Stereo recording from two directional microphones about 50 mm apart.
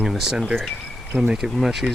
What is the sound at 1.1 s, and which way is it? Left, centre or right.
Speech, right.